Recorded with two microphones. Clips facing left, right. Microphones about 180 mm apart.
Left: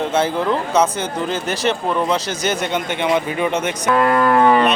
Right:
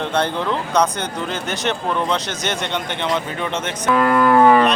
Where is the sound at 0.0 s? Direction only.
5° left (ahead or behind).